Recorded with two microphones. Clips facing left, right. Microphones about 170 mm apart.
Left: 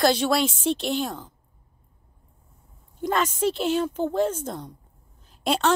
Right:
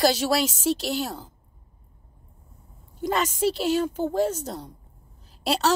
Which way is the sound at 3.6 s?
10° right (ahead or behind).